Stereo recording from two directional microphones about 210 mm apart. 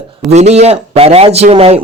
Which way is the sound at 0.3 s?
30° right (ahead or behind).